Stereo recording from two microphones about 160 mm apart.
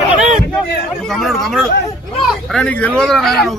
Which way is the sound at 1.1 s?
Centre (ahead or behind).